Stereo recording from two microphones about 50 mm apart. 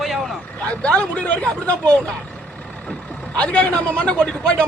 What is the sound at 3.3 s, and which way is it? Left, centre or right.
A man's voice, left.